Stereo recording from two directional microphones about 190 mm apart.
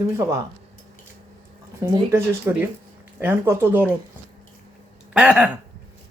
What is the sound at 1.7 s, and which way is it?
Speech, 15° right (ahead or behind).